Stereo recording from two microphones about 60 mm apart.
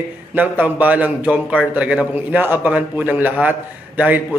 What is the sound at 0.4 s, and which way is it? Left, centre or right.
Speech, right.